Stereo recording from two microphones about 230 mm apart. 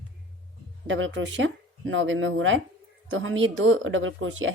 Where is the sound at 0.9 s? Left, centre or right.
Right.